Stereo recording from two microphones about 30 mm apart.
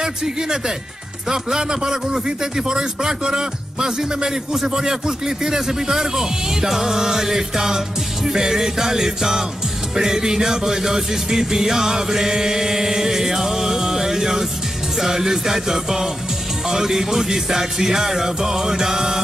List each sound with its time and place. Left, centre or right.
0.0 s music: right
1.3 s a man's voice: centre
3.8 s music: centre